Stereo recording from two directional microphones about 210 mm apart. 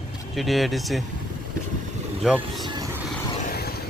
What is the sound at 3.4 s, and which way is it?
Vehicle, 45° left (ahead or behind).